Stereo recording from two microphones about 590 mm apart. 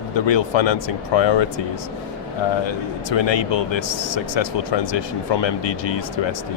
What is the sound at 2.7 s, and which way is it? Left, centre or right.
Speech, left.